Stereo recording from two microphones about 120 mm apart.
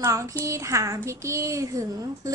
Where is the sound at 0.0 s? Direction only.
25° right (ahead or behind).